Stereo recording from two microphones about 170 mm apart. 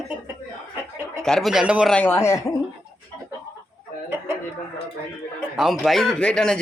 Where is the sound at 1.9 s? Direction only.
15° left (ahead or behind).